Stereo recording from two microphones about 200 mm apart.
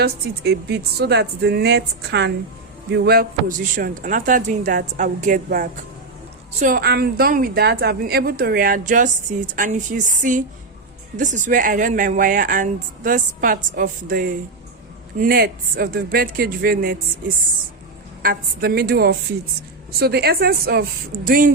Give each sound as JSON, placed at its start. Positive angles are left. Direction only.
{"t": 0.0, "sound": "a woman's voice", "side_deg": -55}
{"t": 18.2, "sound": "a woman's voice", "side_deg": -50}